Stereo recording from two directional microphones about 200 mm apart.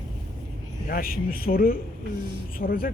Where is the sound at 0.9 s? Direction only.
45° left (ahead or behind).